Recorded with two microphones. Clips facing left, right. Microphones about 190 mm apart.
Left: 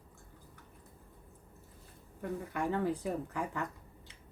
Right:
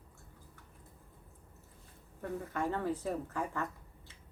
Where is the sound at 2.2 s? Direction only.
15° left (ahead or behind).